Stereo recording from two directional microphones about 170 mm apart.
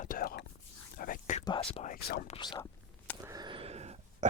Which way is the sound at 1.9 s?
65° left (ahead or behind).